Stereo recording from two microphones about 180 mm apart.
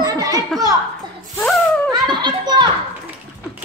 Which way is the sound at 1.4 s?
Centre (ahead or behind).